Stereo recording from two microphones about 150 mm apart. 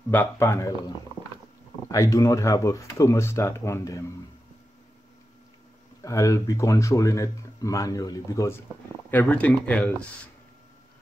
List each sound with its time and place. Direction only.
0.1 s speech: 15° left (ahead or behind)
6.0 s speech: 20° left (ahead or behind)
9.1 s speech: 10° left (ahead or behind)